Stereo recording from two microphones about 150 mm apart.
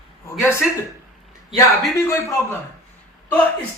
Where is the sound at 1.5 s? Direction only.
20° left (ahead or behind).